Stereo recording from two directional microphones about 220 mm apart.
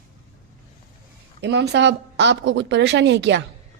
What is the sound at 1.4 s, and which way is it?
Speech, 50° right (ahead or behind).